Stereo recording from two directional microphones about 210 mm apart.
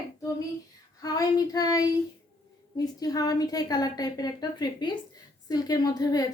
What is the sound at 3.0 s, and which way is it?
A woman's voice, 15° left (ahead or behind).